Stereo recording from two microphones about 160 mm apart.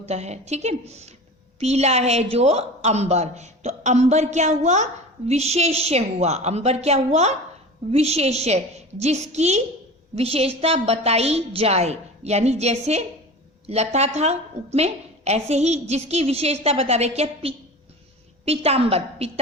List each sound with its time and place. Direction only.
0.0 s a woman's voice: 45° right (ahead or behind)